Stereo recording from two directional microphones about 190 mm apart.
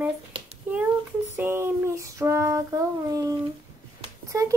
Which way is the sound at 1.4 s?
10° right (ahead or behind).